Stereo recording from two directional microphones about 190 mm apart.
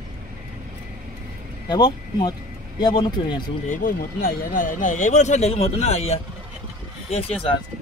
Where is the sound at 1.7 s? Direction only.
20° left (ahead or behind).